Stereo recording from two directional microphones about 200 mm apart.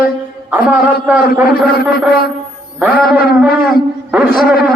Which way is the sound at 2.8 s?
10° right (ahead or behind).